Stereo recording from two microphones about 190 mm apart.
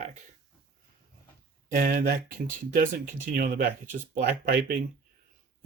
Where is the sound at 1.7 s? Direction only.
50° right (ahead or behind).